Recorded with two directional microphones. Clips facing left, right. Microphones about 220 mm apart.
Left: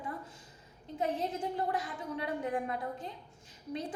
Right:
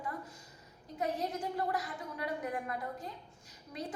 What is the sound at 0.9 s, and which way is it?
A woman's voice, 30° left (ahead or behind).